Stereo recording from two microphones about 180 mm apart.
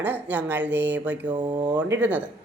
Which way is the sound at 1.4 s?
25° right (ahead or behind).